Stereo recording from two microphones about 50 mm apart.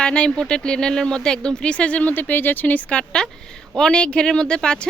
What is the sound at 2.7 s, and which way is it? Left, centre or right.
Speech, left.